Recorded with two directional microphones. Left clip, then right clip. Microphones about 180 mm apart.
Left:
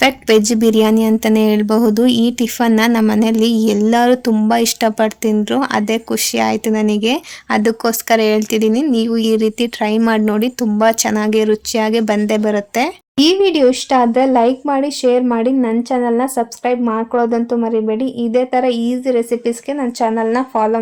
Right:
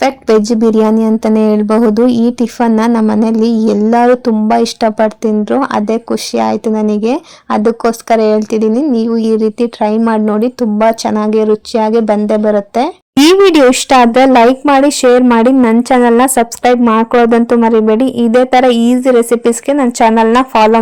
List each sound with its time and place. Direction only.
0.0 s speech: 20° right (ahead or behind)
12.4 s speech: centre (ahead or behind)
13.2 s speech: 40° right (ahead or behind)